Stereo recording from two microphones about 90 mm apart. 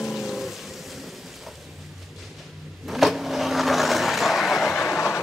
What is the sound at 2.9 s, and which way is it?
Vehicle, centre (ahead or behind).